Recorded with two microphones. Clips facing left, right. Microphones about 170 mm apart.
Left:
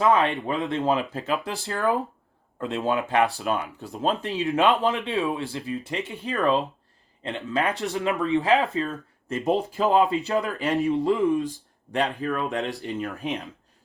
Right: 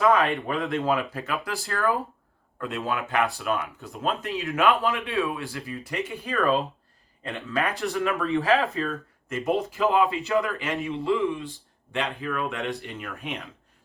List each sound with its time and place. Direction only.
0.0 s speech: 25° left (ahead or behind)
5.1 s speech: 20° left (ahead or behind)
9.3 s speech: 35° left (ahead or behind)